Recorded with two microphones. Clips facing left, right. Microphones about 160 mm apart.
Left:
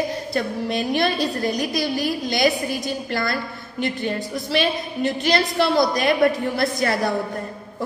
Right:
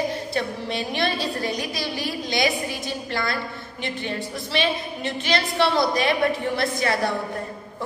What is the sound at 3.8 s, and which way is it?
A woman's voice, 40° left (ahead or behind).